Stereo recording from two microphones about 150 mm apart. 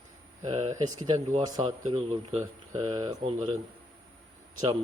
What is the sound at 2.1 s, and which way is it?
Speech, 45° right (ahead or behind).